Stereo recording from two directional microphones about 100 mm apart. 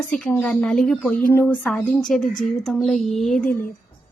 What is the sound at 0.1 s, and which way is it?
Speech, 10° left (ahead or behind).